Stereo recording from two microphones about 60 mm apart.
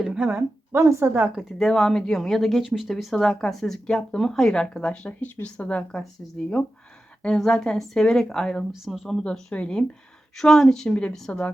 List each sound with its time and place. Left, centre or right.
0.0 s a sound: centre
0.7 s a woman's voice: right
1.0 s speech: right
1.4 s speech: centre
3.2 s speech: centre
7.2 s speech: centre
8.7 s speech: centre
9.2 s speech: centre
10.8 s a woman's voice: centre